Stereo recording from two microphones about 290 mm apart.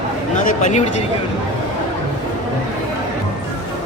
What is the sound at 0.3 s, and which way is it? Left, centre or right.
Speech, left.